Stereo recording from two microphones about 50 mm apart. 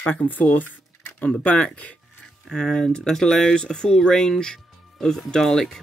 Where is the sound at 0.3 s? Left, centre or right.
Left.